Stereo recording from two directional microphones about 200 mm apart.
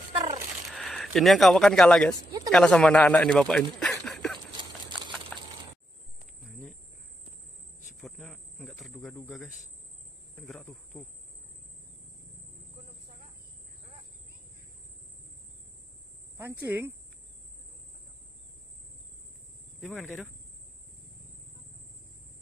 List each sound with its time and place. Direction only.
0.1 s a sound: 25° right (ahead or behind)
0.7 s a man's voice: centre (ahead or behind)
4.0 s a sound: 5° left (ahead or behind)
8.0 s cricket: 5° left (ahead or behind)
16.3 s cricket: 10° right (ahead or behind)
19.8 s cricket: 5° left (ahead or behind)